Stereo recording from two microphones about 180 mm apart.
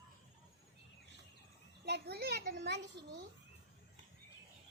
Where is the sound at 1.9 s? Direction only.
65° right (ahead or behind).